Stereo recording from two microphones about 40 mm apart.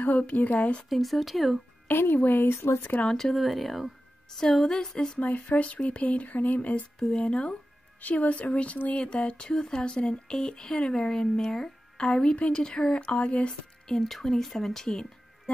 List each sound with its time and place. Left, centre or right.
0.0 s a woman's voice: left
0.8 s speech: centre
1.9 s speech: left
3.1 s speech: centre
3.3 s speech: centre
5.2 s speech: left
10.9 s speech: centre
14.0 s speech: centre